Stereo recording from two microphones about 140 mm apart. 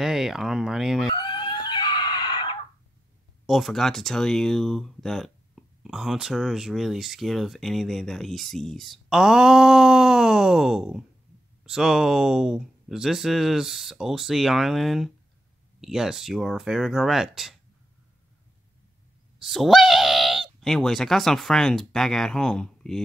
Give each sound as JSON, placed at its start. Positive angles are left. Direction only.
{"t": 0.0, "sound": "speech", "side_deg": -5}
{"t": 1.1, "sound": "chicken", "side_deg": 35}
{"t": 3.4, "sound": "speech", "side_deg": 0}
{"t": 19.4, "sound": "speech", "side_deg": 0}